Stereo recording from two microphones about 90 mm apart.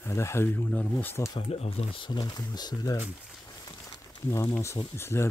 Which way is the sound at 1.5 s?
80° left.